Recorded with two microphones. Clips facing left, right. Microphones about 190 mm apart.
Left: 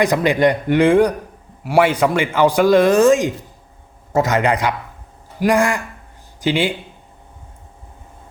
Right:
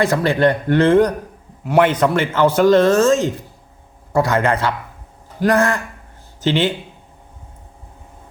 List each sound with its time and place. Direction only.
0.0 s speech: 15° left (ahead or behind)